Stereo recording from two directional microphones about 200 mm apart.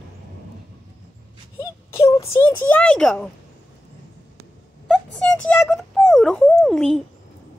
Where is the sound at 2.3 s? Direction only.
10° left (ahead or behind).